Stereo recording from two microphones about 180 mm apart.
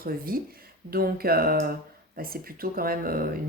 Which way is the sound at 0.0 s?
55° right (ahead or behind).